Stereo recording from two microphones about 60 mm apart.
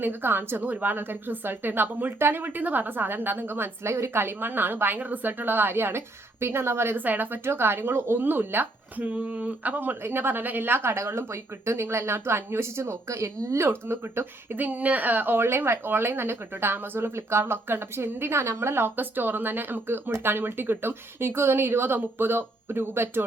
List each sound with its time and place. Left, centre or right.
0.0 s speech: right
6.9 s speech: right
8.2 s speech: right
14.5 s speech: right
15.4 s speech: right